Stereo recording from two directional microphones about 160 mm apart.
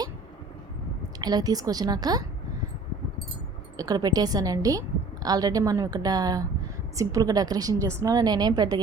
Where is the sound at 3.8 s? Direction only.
25° right (ahead or behind).